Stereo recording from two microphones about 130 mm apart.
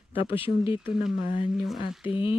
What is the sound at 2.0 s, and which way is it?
Speech, 45° left (ahead or behind).